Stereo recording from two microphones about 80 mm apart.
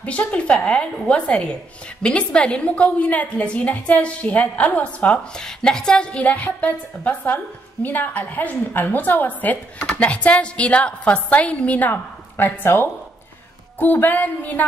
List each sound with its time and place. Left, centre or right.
0.0 s a woman's voice: centre
5.4 s a woman's voice: centre